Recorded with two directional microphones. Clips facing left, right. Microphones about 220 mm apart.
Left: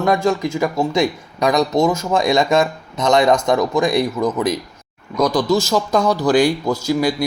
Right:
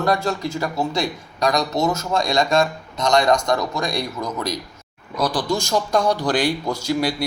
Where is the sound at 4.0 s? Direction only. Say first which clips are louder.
Left 8 dB; 50° left (ahead or behind).